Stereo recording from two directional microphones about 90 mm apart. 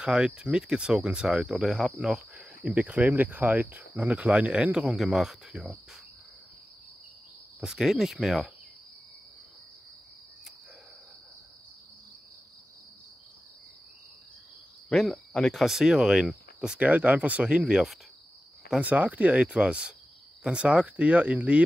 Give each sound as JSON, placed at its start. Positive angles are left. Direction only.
{"t": 0.0, "sound": "speech", "side_deg": -10}
{"t": 3.1, "sound": "cricket", "side_deg": -20}
{"t": 4.0, "sound": "speech", "side_deg": -15}
{"t": 7.6, "sound": "speech", "side_deg": -5}
{"t": 14.9, "sound": "speech", "side_deg": 0}